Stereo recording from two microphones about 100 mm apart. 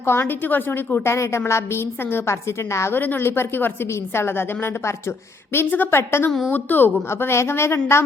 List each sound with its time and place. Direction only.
0.0 s a woman's voice: 25° left (ahead or behind)